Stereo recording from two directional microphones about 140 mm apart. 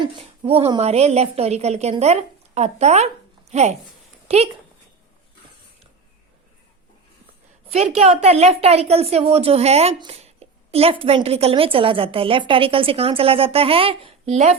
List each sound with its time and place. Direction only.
0.0 s a woman's voice: 45° right (ahead or behind)
7.7 s a woman's voice: 50° right (ahead or behind)